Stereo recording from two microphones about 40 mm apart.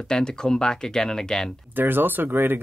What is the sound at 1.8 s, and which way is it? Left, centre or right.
Speech, right.